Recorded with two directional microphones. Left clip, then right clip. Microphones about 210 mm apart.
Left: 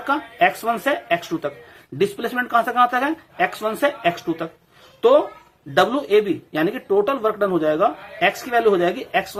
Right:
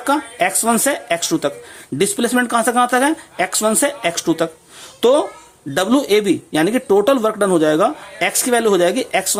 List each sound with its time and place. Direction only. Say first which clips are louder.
0.0 s speech: right 1 dB; 35° right (ahead or behind)